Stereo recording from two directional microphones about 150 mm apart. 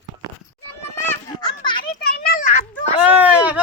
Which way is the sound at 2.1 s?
75° left (ahead or behind).